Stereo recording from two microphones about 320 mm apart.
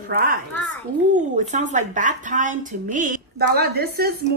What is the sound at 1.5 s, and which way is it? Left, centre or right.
Speech, right.